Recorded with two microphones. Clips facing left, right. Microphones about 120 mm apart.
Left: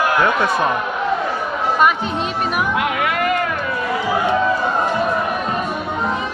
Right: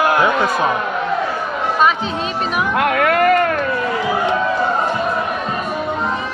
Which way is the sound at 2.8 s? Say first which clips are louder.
Right 5 dB; 50° right (ahead or behind).